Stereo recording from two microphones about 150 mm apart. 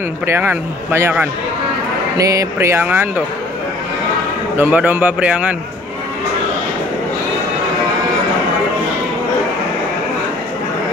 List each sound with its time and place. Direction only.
0.3 s a man's voice: 15° right (ahead or behind)
4.6 s a man's voice: 10° right (ahead or behind)